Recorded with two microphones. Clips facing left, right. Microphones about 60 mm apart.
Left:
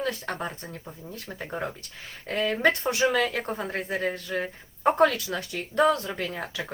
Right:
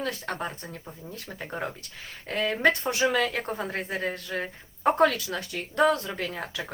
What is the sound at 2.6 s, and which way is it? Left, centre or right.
Speech, left.